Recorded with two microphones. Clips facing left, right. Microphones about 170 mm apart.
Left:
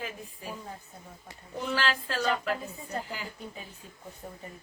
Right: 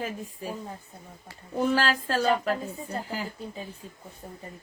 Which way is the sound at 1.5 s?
45° right (ahead or behind).